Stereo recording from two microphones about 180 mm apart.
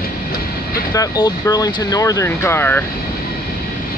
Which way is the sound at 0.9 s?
20° left (ahead or behind).